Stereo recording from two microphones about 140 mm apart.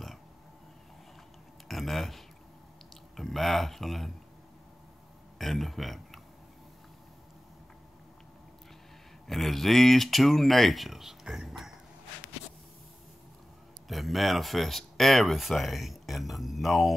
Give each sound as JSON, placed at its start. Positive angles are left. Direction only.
{"t": 1.7, "sound": "speech", "side_deg": 0}
{"t": 5.4, "sound": "speech", "side_deg": 0}
{"t": 9.3, "sound": "speech", "side_deg": 0}
{"t": 13.8, "sound": "speech", "side_deg": 0}